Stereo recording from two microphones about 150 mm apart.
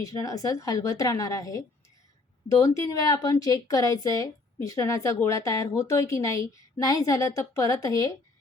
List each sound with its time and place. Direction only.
0.0 s a woman's voice: 20° left (ahead or behind)